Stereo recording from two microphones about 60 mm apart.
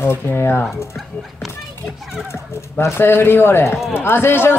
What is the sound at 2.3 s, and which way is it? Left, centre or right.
Speech, left.